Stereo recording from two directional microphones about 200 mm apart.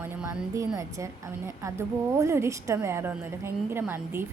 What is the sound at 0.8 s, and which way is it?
A woman's voice, 15° right (ahead or behind).